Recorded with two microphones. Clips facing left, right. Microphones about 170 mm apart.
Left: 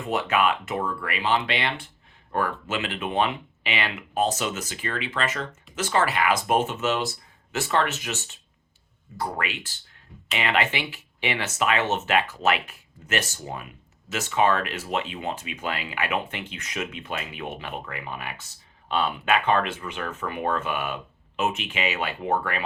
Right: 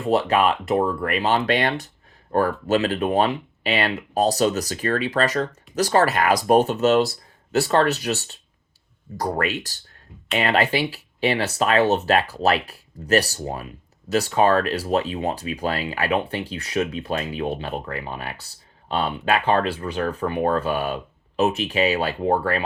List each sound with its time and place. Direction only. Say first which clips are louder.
0.0 s speech: right 5 dB; 35° right (ahead or behind)